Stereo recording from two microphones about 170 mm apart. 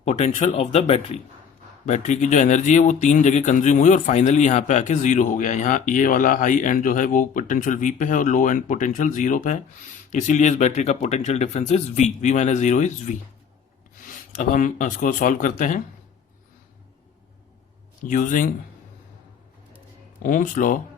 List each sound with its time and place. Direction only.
0.0 s speech: 45° left (ahead or behind)
18.0 s speech: 50° left (ahead or behind)
20.2 s speech: 50° left (ahead or behind)